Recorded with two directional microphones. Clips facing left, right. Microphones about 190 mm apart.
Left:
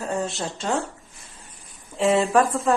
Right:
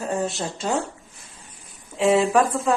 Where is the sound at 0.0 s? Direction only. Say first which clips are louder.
Right 1 dB; 15° right (ahead or behind).